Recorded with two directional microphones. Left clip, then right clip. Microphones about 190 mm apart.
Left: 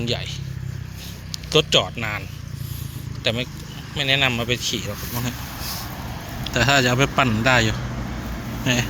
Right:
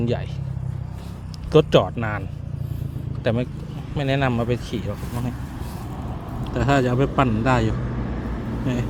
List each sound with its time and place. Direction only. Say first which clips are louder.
0.0 s speech: even; 30° right (ahead or behind)
1.3 s a man's voice: right 2 dB; 30° right (ahead or behind)
3.2 s speech: even; 30° right (ahead or behind)
4.3 s speech: left 2 dB; 20° right (ahead or behind)
4.9 s a sound: left 2 dB; 15° left (ahead or behind)
6.5 s a man's voice: left 3 dB; 5° left (ahead or behind)